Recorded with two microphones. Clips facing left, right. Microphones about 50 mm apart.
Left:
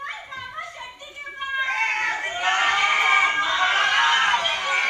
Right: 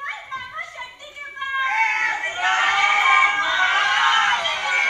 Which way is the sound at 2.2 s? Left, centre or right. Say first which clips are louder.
Right 2 dB; centre.